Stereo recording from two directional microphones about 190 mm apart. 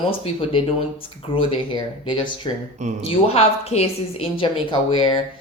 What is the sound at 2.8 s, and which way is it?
Speech, 40° right (ahead or behind).